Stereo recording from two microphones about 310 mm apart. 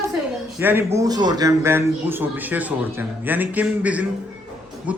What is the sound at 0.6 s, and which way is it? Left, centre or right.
A man's voice, centre.